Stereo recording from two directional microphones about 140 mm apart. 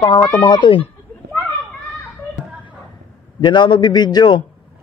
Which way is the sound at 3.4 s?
35° left (ahead or behind).